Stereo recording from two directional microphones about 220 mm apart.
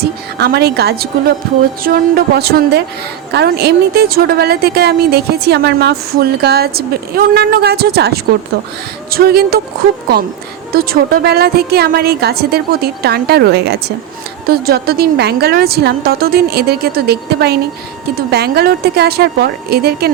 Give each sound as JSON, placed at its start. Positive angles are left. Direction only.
{"t": 0.0, "sound": "a woman's voice", "side_deg": -45}
{"t": 10.8, "sound": "a woman's voice", "side_deg": -45}